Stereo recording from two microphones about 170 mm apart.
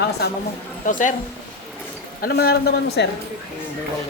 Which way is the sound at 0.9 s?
50° left (ahead or behind).